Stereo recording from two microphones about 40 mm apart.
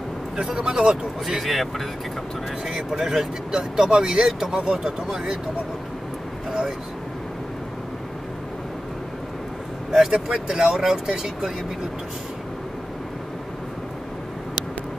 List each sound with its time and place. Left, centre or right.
0.7 s speech: centre
1.4 s speech: centre
2.7 s speech: centre
9.9 s speech: centre
10.2 s speech: right